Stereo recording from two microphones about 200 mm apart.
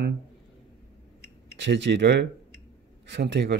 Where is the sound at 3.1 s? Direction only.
60° right (ahead or behind).